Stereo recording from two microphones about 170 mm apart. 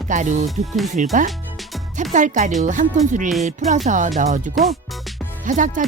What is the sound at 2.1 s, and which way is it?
Speech, 45° right (ahead or behind).